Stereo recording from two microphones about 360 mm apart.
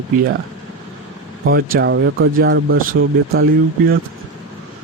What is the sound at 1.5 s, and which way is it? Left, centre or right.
Speech, right.